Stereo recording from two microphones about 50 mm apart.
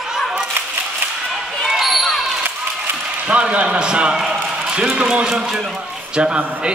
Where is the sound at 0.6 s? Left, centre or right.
Right.